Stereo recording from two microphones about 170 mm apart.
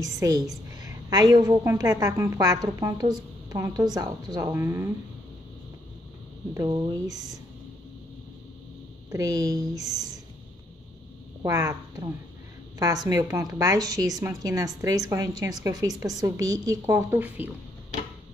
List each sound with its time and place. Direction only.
0.0 s a woman's voice: 20° right (ahead or behind)
6.5 s a woman's voice: 20° right (ahead or behind)
9.1 s a woman's voice: 20° right (ahead or behind)
9.8 s speech: centre (ahead or behind)
11.4 s a woman's voice: 20° right (ahead or behind)